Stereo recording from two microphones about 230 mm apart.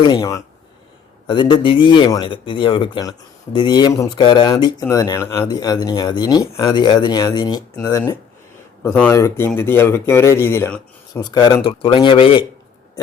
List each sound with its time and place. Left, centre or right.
0.1 s a man's voice: centre